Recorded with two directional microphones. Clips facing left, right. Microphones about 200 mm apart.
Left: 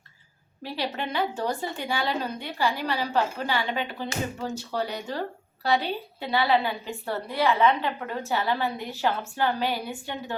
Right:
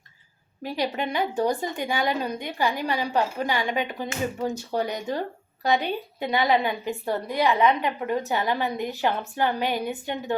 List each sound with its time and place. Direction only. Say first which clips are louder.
0.6 s a woman's voice: right 4 dB; 15° right (ahead or behind)